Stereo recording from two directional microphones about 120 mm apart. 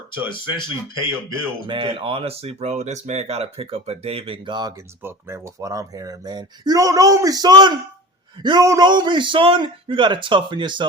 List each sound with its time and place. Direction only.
0.1 s speech: 40° left (ahead or behind)
1.6 s speech: 45° right (ahead or behind)
5.0 s a man's voice: 25° right (ahead or behind)